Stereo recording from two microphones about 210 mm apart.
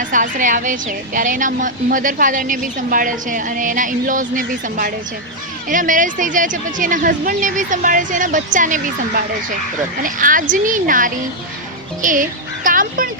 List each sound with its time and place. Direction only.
0.0 s a woman's voice: 40° right (ahead or behind)